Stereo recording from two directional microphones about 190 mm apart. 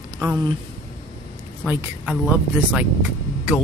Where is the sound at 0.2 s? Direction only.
20° right (ahead or behind).